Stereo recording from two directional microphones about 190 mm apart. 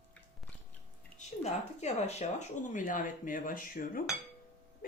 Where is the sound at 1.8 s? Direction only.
35° left (ahead or behind).